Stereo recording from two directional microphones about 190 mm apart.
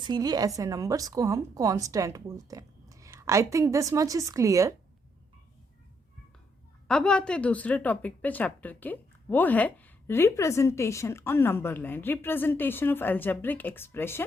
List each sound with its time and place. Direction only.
0.0 s a woman's voice: 20° right (ahead or behind)
6.8 s a woman's voice: 5° left (ahead or behind)